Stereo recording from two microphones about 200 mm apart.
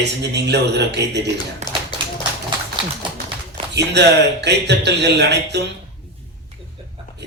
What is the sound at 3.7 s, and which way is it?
Speech, 55° right (ahead or behind).